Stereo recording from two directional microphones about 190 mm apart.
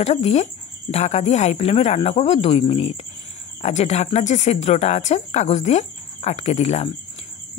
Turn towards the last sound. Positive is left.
turn(degrees=35)  # may be behind; listen again after turning